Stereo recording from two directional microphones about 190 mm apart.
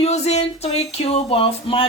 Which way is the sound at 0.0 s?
35° left (ahead or behind).